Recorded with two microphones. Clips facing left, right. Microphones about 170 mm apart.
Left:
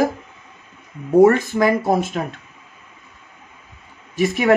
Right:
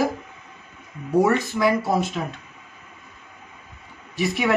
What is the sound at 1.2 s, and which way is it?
A man's voice, 50° left (ahead or behind).